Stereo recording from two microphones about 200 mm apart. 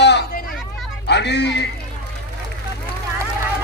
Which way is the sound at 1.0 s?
60° left (ahead or behind).